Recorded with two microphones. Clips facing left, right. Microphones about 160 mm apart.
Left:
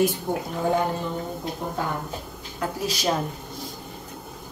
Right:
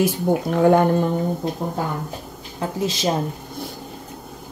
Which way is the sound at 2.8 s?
25° right (ahead or behind).